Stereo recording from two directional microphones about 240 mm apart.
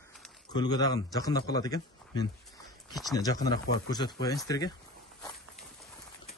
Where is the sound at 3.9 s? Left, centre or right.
Centre.